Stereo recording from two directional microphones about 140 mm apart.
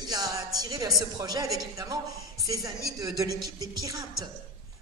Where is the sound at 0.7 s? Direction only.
25° right (ahead or behind).